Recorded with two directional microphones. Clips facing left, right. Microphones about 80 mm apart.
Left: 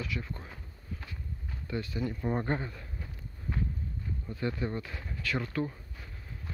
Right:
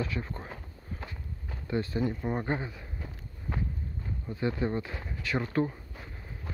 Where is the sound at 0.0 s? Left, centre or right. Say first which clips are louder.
Right 4 dB; right.